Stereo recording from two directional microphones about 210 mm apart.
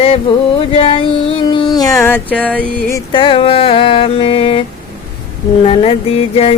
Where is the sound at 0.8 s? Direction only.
25° left (ahead or behind); by 2.6 s 5° left (ahead or behind).